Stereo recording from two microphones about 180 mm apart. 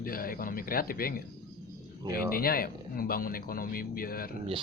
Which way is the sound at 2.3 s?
55° left (ahead or behind).